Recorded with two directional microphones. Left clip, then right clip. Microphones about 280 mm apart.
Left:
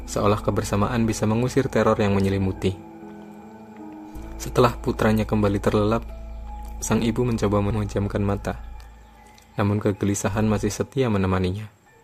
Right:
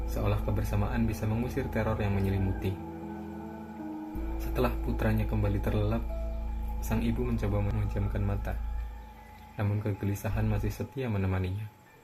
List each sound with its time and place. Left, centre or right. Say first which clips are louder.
0.1 s speech: left 13 dB; left
4.5 s speech: left 12 dB; left
9.6 s speech: left 12 dB; left